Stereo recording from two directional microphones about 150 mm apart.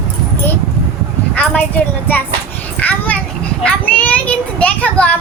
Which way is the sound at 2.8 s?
10° left (ahead or behind).